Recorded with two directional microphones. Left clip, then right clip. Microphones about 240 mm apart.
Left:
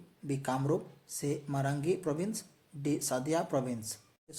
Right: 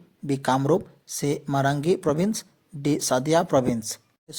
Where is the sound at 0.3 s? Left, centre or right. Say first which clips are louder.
Right 11 dB; right.